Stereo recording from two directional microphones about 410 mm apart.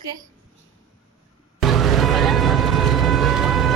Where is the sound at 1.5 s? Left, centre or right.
Centre.